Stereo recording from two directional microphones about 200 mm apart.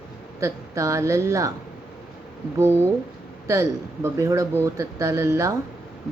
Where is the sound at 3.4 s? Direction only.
15° right (ahead or behind).